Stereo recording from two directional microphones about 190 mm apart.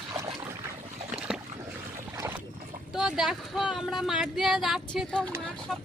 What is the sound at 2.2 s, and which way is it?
Boat, 15° right (ahead or behind).